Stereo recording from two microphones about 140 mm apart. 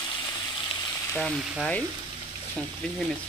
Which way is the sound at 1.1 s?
5° left (ahead or behind).